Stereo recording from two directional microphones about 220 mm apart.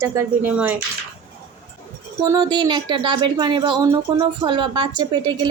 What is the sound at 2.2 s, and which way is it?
A woman's voice, 20° right (ahead or behind).